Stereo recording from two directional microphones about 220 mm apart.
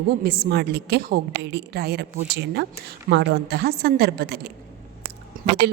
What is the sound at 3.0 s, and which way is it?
A woman's voice, 50° right (ahead or behind).